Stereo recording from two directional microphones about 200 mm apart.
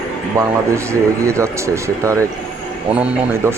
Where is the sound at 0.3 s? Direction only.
15° right (ahead or behind).